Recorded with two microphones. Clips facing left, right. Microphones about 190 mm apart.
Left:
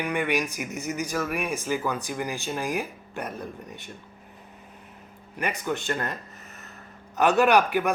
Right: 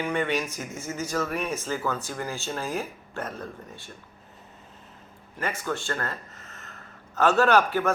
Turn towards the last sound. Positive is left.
turn(degrees=15)  # may be behind; listen again after turning